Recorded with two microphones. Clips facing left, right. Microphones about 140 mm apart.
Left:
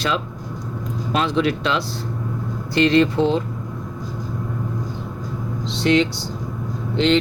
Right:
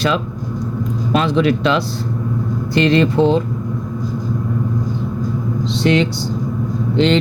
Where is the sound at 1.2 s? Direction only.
80° right.